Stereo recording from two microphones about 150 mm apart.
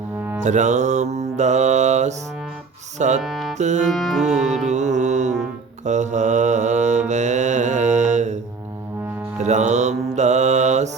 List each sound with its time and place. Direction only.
0.4 s mantra: 50° right (ahead or behind)
3.2 s music: centre (ahead or behind)
3.6 s mantra: 50° right (ahead or behind)
3.8 s music: centre (ahead or behind)
4.7 s mantra: 50° right (ahead or behind)
9.4 s mantra: 50° right (ahead or behind)